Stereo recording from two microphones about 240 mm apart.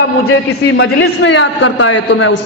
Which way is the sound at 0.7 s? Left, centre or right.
Left.